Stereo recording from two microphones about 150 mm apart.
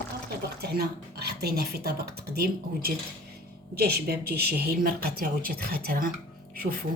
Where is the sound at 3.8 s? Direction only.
90° right.